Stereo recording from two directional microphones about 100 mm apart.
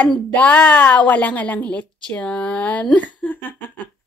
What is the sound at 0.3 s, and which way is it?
A woman's voice, 15° left (ahead or behind).